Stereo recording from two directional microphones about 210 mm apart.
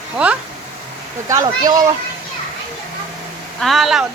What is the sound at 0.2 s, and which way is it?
Speech, 5° right (ahead or behind).